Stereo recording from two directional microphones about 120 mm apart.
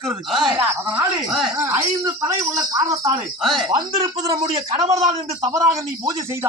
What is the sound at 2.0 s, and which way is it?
Speech, 25° right (ahead or behind).